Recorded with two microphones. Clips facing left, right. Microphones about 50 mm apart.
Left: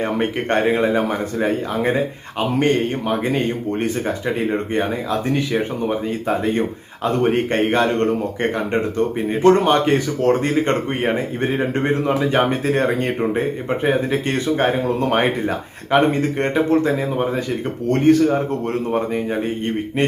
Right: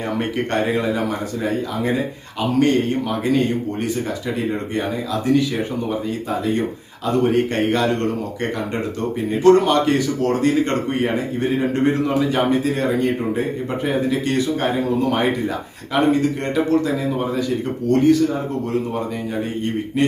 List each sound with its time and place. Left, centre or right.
0.2 s speech: left
13.7 s speech: left
20.0 s speech: left